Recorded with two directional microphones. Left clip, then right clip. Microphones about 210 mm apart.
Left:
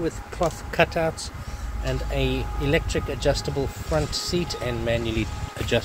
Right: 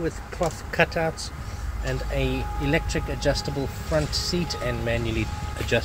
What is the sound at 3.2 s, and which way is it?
Speech, 50° left (ahead or behind).